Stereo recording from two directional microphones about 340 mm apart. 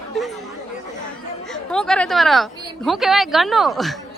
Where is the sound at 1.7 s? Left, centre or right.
Centre.